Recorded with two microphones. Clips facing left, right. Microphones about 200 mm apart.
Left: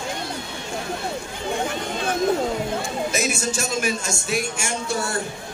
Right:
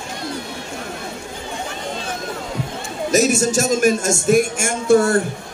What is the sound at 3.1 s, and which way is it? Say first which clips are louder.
A man's voice: right 9 dB; 40° right (ahead or behind).